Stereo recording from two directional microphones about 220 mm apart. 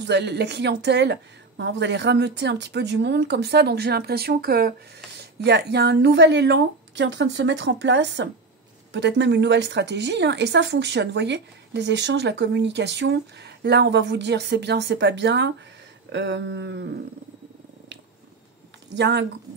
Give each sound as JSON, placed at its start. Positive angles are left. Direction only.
{"t": 0.0, "sound": "speech", "side_deg": -50}
{"t": 18.9, "sound": "speech", "side_deg": -50}